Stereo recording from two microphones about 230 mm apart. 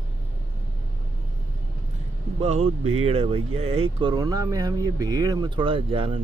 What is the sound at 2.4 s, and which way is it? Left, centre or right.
Speech, right.